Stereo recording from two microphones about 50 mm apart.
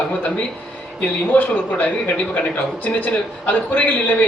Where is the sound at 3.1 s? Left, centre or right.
Left.